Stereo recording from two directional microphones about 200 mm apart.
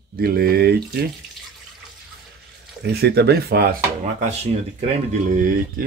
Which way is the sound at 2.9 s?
55° right (ahead or behind).